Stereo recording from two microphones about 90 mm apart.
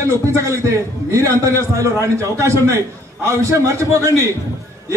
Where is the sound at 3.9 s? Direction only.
35° right (ahead or behind).